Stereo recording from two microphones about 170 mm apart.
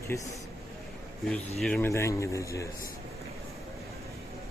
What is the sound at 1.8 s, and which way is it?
Speech, 15° left (ahead or behind).